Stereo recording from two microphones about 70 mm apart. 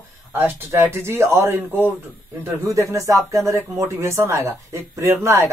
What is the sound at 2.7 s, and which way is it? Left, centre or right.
Speech, right.